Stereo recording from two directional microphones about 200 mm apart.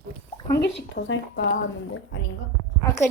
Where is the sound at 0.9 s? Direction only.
60° left (ahead or behind).